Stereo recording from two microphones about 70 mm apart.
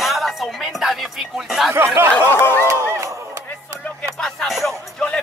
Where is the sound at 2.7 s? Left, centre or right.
Right.